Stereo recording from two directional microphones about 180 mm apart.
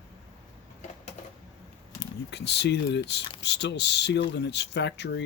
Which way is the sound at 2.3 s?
70° left (ahead or behind).